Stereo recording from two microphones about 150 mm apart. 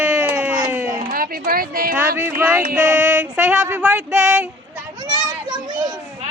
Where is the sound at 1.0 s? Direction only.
75° right (ahead or behind).